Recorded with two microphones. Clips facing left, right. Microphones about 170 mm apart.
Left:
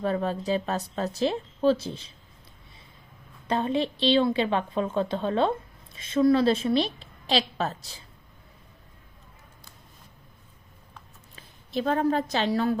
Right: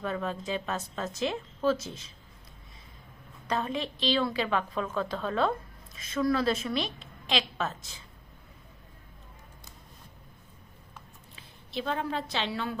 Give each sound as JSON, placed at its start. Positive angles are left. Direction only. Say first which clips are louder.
{"t": 0.0, "sound": "speech", "louder": "left 6 dB", "side_deg": 35}
{"t": 3.4, "sound": "a woman's voice", "louder": "left 6 dB", "side_deg": 30}
{"t": 11.3, "sound": "a woman's voice", "louder": "left 6 dB", "side_deg": 45}